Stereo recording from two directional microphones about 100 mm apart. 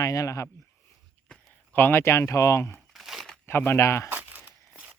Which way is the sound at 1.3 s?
10° left (ahead or behind).